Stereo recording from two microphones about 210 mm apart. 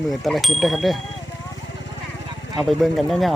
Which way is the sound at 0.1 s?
Centre (ahead or behind).